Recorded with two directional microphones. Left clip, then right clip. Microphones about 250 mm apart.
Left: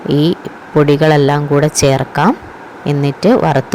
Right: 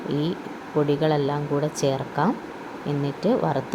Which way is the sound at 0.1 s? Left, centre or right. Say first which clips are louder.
Left 14 dB; left.